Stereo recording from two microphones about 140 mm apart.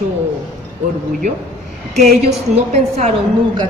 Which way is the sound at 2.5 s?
50° right (ahead or behind).